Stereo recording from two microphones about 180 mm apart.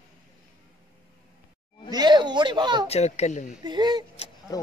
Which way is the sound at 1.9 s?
25° right (ahead or behind).